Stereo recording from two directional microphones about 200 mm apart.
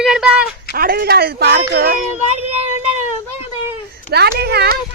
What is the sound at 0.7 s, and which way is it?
Speech, 50° right (ahead or behind).